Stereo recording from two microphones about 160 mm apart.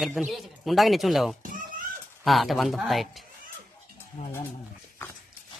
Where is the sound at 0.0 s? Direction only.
Centre (ahead or behind).